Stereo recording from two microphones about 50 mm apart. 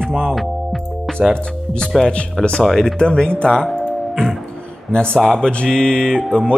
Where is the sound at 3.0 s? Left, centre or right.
Centre.